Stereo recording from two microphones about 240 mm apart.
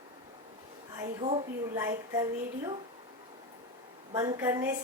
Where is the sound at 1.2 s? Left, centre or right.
Right.